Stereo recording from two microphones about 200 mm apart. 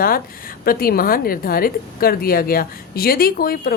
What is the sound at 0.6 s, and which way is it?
A woman's voice, 50° left (ahead or behind).